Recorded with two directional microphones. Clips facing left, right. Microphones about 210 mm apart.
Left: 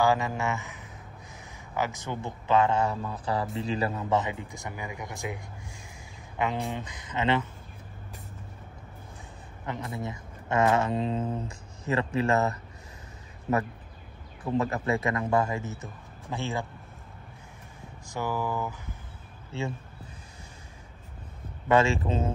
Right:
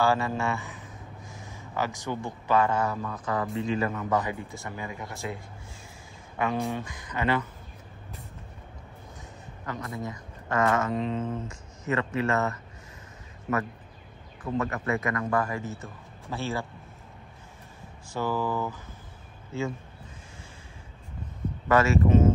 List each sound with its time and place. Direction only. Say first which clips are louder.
0.0 s a man's voice: even; 15° left (ahead or behind)
9.7 s a man's voice: even; 25° left (ahead or behind)
14.6 s a man's voice: left 1 dB; 30° left (ahead or behind)
18.1 s a man's voice: right 2 dB; 15° left (ahead or behind)
21.6 s a man's voice: right 1 dB; 25° left (ahead or behind)